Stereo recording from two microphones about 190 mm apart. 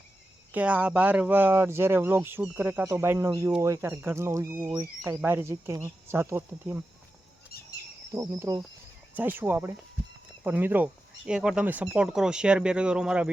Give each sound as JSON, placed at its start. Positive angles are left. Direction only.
{"t": 0.5, "sound": "speech", "side_deg": -5}
{"t": 7.5, "sound": "a sound", "side_deg": 55}
{"t": 8.1, "sound": "speech", "side_deg": -15}